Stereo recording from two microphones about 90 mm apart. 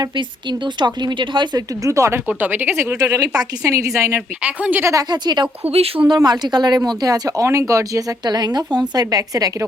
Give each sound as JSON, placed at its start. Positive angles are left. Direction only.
{"t": 0.0, "sound": "a woman's voice", "side_deg": -60}
{"t": 1.5, "sound": "speech", "side_deg": -40}
{"t": 2.2, "sound": "speech", "side_deg": -20}
{"t": 3.0, "sound": "speech", "side_deg": -45}
{"t": 4.4, "sound": "speech", "side_deg": -15}
{"t": 4.9, "sound": "a woman's voice", "side_deg": -45}